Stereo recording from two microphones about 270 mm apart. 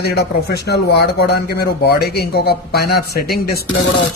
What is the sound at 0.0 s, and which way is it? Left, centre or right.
Speech, left.